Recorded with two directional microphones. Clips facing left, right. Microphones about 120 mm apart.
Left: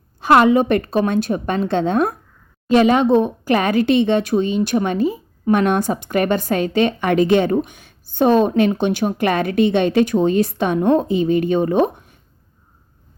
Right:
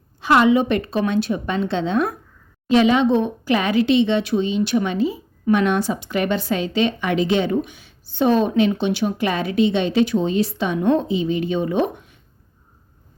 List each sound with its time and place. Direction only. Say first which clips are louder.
0.2 s speech: left 3 dB; 50° left (ahead or behind)